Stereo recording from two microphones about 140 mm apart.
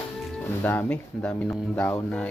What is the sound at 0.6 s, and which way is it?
Speech, 15° left (ahead or behind).